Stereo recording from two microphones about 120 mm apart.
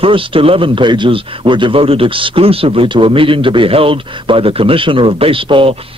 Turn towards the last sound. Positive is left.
turn(degrees=-50)  # may be behind; listen again after turning